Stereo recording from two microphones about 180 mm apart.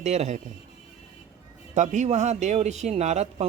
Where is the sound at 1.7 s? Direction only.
40° right (ahead or behind).